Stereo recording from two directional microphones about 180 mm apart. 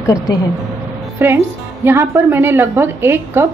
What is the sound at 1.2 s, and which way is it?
A woman's voice, 15° right (ahead or behind).